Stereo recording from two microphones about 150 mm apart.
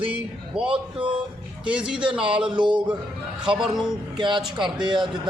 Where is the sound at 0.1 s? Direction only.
5° right (ahead or behind).